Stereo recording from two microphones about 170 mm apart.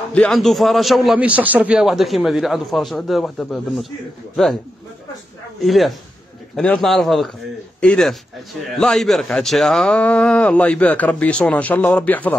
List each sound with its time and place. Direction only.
0.1 s a man's voice: 5° left (ahead or behind)
5.6 s a man's voice: centre (ahead or behind)